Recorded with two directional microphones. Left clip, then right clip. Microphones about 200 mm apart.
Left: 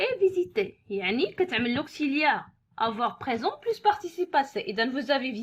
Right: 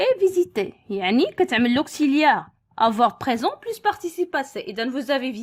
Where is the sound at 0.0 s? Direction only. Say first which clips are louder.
Right 6 dB; 50° right (ahead or behind).